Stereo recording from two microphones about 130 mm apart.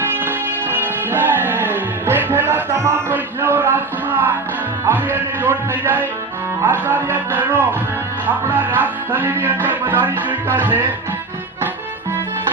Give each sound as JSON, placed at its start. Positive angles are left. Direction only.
{"t": 0.0, "sound": "music", "side_deg": -15}